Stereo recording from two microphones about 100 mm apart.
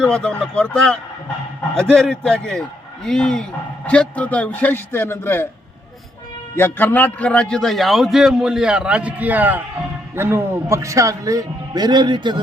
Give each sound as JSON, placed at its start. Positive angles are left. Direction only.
{"t": 0.0, "sound": "a man's voice", "side_deg": 10}
{"t": 6.6, "sound": "a man's voice", "side_deg": 20}